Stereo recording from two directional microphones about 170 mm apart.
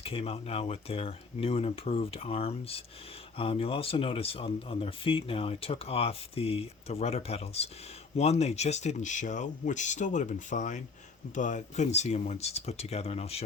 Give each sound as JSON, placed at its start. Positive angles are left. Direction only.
{"t": 0.0, "sound": "speech", "side_deg": 35}